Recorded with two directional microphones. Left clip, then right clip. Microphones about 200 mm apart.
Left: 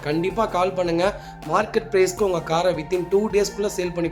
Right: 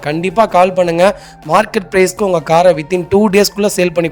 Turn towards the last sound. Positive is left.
turn(degrees=-45)  # may be behind; listen again after turning